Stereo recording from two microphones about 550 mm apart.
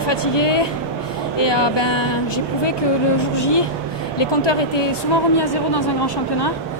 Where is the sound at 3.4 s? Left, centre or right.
Left.